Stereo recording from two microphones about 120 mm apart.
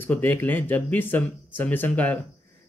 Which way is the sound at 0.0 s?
15° left (ahead or behind).